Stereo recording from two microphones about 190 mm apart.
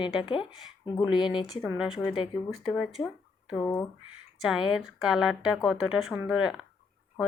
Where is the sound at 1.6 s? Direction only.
5° right (ahead or behind).